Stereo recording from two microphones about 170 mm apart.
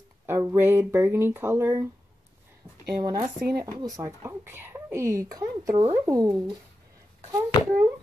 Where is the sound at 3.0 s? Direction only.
20° right (ahead or behind).